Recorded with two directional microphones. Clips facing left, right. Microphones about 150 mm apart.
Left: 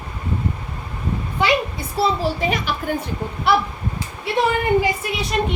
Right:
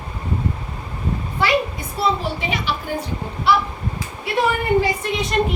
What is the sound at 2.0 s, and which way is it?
Speech, 45° left (ahead or behind).